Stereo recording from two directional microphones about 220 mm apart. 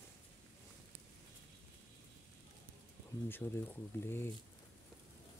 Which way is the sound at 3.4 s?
15° left (ahead or behind).